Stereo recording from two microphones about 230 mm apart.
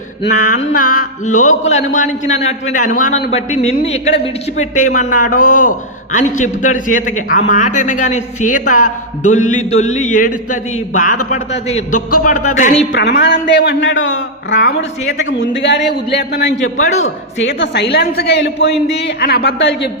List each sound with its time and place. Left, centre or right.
0.3 s a man's voice: left
11.9 s a man's voice: left
12.5 s a man's voice: left
12.9 s a man's voice: left
16.8 s a man's voice: left
17.6 s a man's voice: left